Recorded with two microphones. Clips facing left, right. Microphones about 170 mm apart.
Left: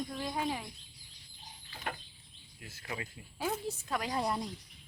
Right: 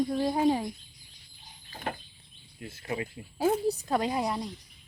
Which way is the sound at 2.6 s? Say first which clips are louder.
Right 8 dB; 30° right (ahead or behind).